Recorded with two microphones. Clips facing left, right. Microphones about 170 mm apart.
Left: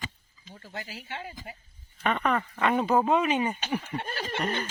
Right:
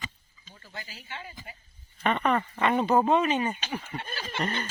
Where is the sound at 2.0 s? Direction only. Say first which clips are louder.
Right 1 dB; centre (ahead or behind).